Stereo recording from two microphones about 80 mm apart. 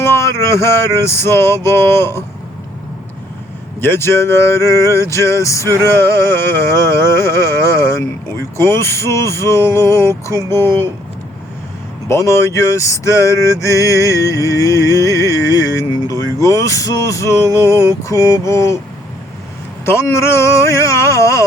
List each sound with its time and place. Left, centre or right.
0.0 s male singing: left
3.8 s male singing: left
10.5 s speech: left
12.0 s male singing: left
16.0 s speech: left
19.9 s male singing: left